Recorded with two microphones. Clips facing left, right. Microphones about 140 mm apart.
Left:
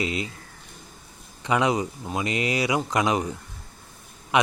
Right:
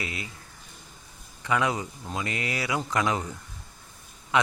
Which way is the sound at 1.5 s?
20° left (ahead or behind).